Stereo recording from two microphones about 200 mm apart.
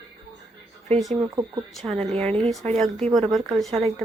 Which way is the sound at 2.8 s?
Centre (ahead or behind).